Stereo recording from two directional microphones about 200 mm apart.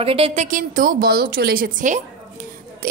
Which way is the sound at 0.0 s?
30° right (ahead or behind).